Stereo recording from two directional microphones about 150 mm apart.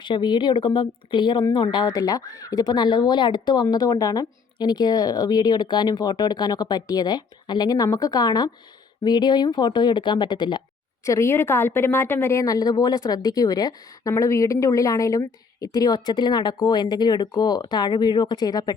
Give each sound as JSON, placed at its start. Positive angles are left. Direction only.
{"t": 0.0, "sound": "speech", "side_deg": 30}
{"t": 11.0, "sound": "speech", "side_deg": 20}